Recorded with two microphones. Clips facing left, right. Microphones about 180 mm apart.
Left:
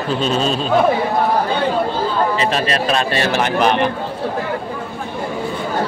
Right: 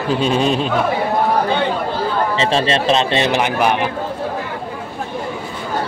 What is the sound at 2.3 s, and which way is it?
Speech, 25° right (ahead or behind).